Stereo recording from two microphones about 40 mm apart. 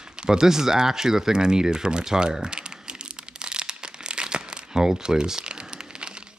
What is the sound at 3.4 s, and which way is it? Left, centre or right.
Crumpling, right.